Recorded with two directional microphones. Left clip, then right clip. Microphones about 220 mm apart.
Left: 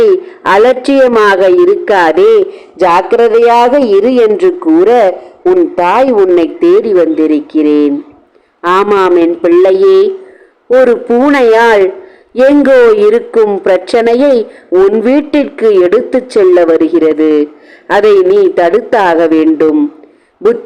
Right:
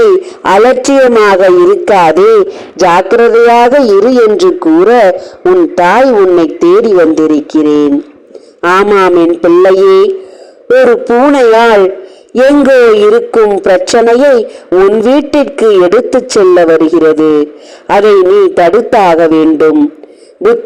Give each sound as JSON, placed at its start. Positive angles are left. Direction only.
{"t": 0.0, "sound": "a man's voice", "side_deg": -10}
{"t": 11.1, "sound": "speech", "side_deg": 0}
{"t": 11.3, "sound": "a man's voice", "side_deg": -15}